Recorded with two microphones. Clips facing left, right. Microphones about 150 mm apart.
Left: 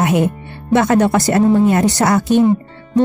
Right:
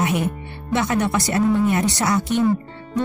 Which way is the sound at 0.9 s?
35° left (ahead or behind).